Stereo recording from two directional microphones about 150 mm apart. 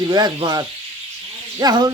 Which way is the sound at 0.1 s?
25° right (ahead or behind).